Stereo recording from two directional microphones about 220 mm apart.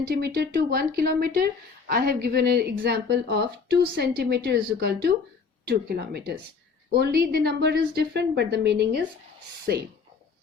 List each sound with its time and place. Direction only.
0.1 s a woman's voice: 45° right (ahead or behind)